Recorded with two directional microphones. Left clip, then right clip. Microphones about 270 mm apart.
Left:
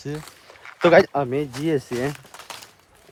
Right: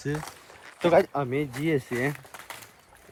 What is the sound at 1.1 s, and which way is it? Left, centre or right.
Speech, centre.